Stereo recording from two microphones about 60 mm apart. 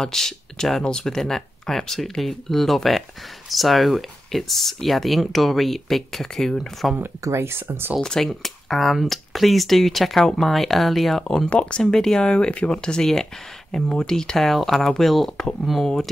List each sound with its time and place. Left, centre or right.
0.0 s speech: centre
7.2 s speech: right
8.0 s speech: centre